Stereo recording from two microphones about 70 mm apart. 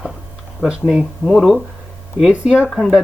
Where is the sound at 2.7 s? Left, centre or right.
Centre.